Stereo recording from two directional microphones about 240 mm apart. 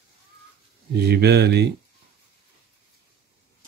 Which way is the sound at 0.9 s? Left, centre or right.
Right.